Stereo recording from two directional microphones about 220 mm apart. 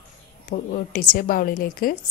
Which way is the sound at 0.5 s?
45° left (ahead or behind).